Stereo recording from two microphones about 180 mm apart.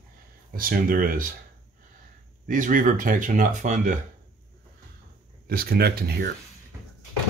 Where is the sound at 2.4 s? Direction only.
45° right (ahead or behind).